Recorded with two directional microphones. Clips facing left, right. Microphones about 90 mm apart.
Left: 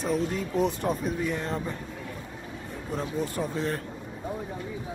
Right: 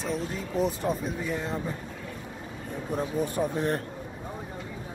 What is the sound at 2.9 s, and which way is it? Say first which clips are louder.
Speech: right 2 dB; 15° right (ahead or behind).